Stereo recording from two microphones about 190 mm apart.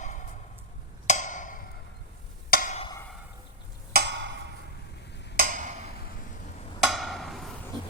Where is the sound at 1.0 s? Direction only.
40° left (ahead or behind).